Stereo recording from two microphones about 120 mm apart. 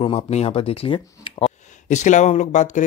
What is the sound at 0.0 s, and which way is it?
Speech, 55° left (ahead or behind).